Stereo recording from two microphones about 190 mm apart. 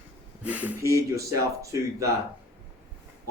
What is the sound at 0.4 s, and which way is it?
Speech, 10° right (ahead or behind).